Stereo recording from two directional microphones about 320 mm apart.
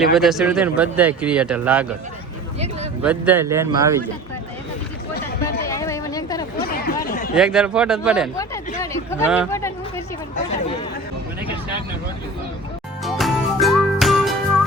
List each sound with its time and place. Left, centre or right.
0.1 s speech: centre
3.0 s speech: centre
5.6 s a sound: centre
6.6 s chatter: left
7.3 s speech: centre
8.8 s a sound: centre
9.2 s speech: centre
9.5 s a sound: centre
13.1 s music: centre